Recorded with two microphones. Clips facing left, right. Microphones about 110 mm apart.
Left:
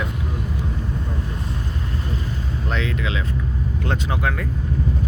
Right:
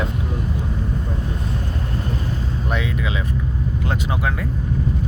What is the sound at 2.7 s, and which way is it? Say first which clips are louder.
Speech: even; 10° right (ahead or behind).